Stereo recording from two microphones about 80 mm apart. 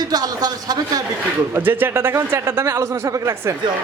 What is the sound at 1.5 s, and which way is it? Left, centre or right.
A man's voice, right.